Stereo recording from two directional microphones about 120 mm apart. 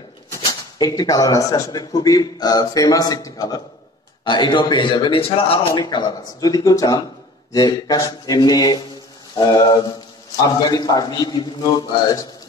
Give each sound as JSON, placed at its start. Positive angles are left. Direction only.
{"t": 0.3, "sound": "speech", "side_deg": 30}
{"t": 9.3, "sound": "mantra", "side_deg": 35}
{"t": 10.3, "sound": "speech", "side_deg": 35}